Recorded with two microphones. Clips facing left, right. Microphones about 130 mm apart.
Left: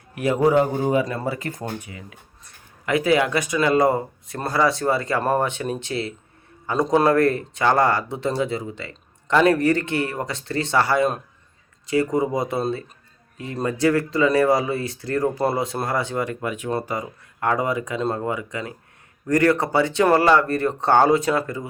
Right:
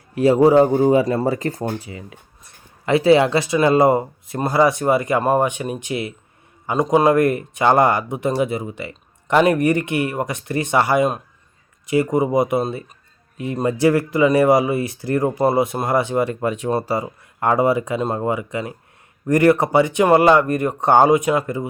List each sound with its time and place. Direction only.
0.1 s speech: 30° right (ahead or behind)
1.8 s speech: 25° right (ahead or behind)